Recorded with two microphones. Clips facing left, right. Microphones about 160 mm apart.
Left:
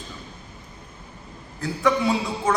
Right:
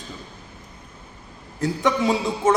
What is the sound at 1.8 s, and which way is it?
Speech, 20° right (ahead or behind).